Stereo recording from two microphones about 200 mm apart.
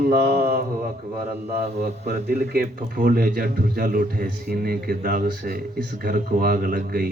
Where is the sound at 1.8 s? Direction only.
50° right (ahead or behind).